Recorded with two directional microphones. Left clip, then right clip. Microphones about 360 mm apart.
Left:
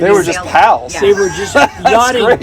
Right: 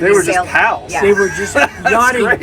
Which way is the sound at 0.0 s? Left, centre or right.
Centre.